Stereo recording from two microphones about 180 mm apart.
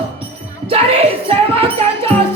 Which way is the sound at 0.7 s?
30° right (ahead or behind).